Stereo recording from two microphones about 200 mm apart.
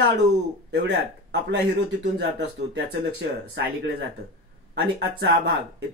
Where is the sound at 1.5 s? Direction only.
60° right (ahead or behind).